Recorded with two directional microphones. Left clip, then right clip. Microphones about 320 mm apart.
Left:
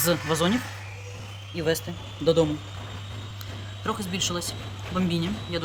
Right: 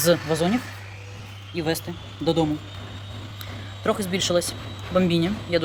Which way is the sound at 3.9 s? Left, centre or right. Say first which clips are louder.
Right 5 dB; centre.